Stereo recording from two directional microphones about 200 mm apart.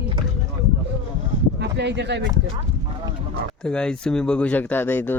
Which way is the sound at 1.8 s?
60° right (ahead or behind).